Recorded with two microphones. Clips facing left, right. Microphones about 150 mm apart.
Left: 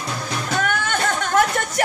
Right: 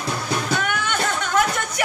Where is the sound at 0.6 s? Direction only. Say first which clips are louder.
Left 2 dB; 45° left (ahead or behind).